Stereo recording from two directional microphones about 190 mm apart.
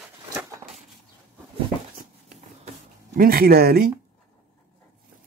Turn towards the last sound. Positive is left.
turn(degrees=-55)  # may be behind; listen again after turning